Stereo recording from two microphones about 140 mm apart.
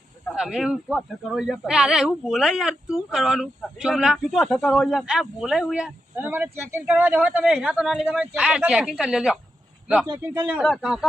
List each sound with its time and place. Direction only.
0.3 s speech: 5° right (ahead or behind)
6.1 s a man's voice: 15° right (ahead or behind)